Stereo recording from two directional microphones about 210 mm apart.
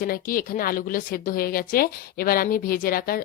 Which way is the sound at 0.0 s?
40° left (ahead or behind).